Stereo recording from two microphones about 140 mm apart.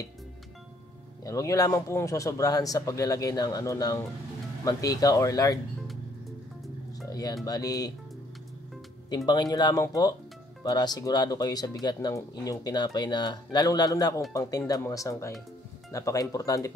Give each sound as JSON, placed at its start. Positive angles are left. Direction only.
{"t": 1.2, "sound": "speech", "side_deg": 25}
{"t": 7.1, "sound": "music", "side_deg": 25}
{"t": 7.4, "sound": "speech", "side_deg": 25}
{"t": 9.1, "sound": "speech", "side_deg": 30}